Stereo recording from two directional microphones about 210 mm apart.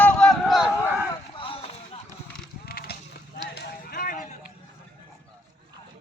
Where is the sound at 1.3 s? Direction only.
25° left (ahead or behind).